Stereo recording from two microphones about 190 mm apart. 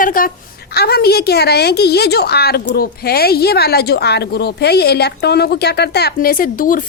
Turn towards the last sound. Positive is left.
turn(degrees=50)  # may be behind; listen again after turning